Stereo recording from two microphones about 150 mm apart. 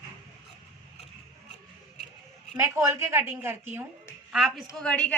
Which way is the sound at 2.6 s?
15° right (ahead or behind).